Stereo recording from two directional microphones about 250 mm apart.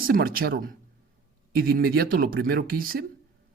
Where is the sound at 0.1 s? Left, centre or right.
Right.